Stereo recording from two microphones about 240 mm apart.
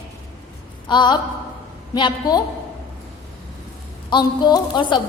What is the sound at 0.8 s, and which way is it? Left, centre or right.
A woman's voice, centre.